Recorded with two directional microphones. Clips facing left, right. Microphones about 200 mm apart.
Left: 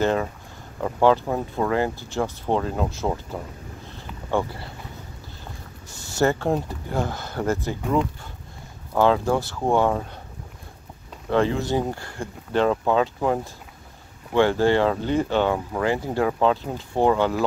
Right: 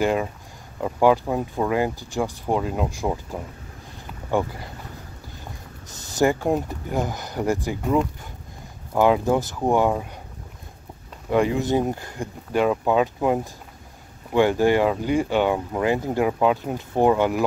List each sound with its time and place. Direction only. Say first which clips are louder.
0.0 s speech: even; 10° right (ahead or behind)
8.9 s speech: right 1 dB; 15° right (ahead or behind)
11.2 s speech: right 1 dB; 15° right (ahead or behind)